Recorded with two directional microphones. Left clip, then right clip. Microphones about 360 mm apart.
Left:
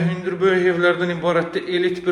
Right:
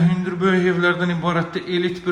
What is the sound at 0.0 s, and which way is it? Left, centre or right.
A man's voice, centre.